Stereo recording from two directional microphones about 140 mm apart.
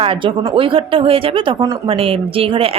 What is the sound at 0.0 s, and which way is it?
Speech, 40° right (ahead or behind).